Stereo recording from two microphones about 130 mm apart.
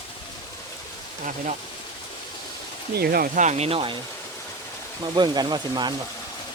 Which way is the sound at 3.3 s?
60° right (ahead or behind).